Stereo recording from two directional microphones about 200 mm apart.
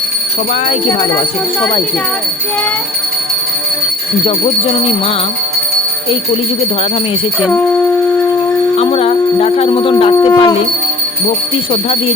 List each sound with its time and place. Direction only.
4.3 s speech: 25° left (ahead or behind)
8.7 s music: 30° left (ahead or behind)
10.2 s speech: 25° left (ahead or behind)
11.7 s speech: 25° left (ahead or behind)